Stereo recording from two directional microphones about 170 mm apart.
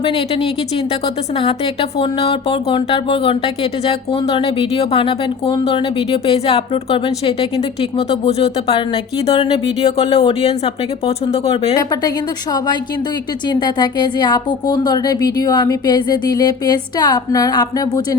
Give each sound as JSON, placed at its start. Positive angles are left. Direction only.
{"t": 1.4, "sound": "speech", "side_deg": 30}
{"t": 11.8, "sound": "speech", "side_deg": 20}
{"t": 13.5, "sound": "speech", "side_deg": 25}